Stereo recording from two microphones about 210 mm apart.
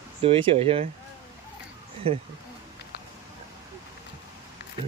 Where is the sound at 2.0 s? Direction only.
25° right (ahead or behind).